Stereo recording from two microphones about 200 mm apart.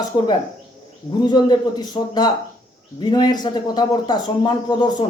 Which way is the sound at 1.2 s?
20° left (ahead or behind).